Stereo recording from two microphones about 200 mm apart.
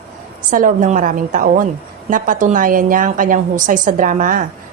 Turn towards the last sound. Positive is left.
turn(degrees=-40)  # may be behind; listen again after turning